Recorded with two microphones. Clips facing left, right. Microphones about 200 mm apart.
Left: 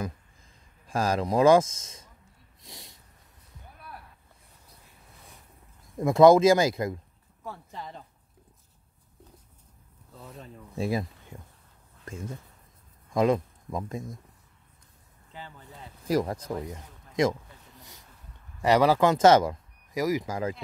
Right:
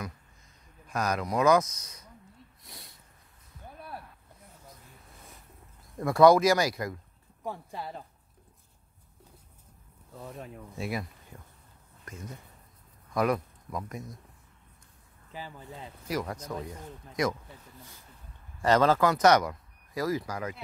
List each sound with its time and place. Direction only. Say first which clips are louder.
0.8 s speech: left 4 dB; 30° left (ahead or behind)
5.9 s speech: left 3 dB; 20° left (ahead or behind)
7.4 s speech: right 3 dB; 15° right (ahead or behind)
10.2 s speech: right 3 dB; 5° right (ahead or behind)
10.8 s speech: left 6 dB; 25° left (ahead or behind)
16.1 s speech: left 6 dB; 35° left (ahead or behind)
18.6 s a man's voice: left 2 dB; 15° left (ahead or behind)
19.0 s speech: left 3 dB; 25° left (ahead or behind)
20.0 s speech: left 3 dB; 15° left (ahead or behind)